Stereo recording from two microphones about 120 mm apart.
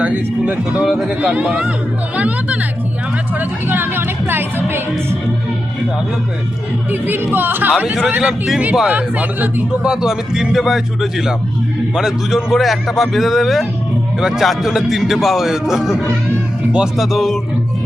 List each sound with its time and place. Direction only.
0.0 s speech: 10° right (ahead or behind)
6.9 s speech: 15° right (ahead or behind)
8.1 s speech: 5° right (ahead or behind)